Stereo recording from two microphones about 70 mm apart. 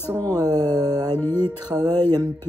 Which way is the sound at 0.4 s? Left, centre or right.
Right.